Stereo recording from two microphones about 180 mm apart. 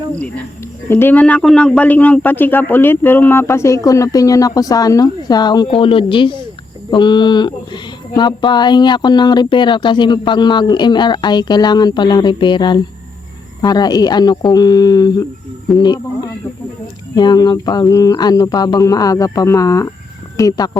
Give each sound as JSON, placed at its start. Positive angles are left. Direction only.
{"t": 0.9, "sound": "speech", "side_deg": 10}